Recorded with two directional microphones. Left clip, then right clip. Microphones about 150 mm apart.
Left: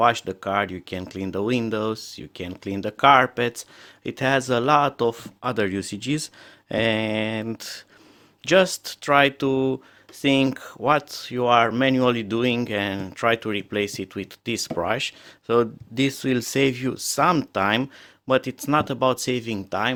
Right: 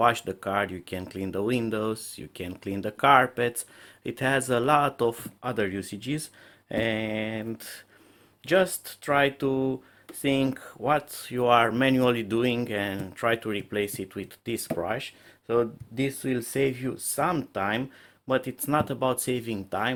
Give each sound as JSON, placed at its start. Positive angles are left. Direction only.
{"t": 0.0, "sound": "speech", "side_deg": 25}